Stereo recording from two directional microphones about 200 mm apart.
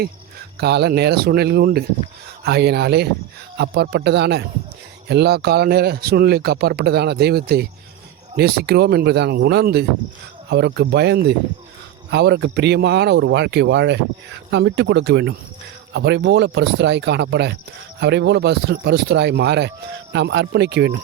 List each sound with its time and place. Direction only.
0.6 s speech: 55° right (ahead or behind)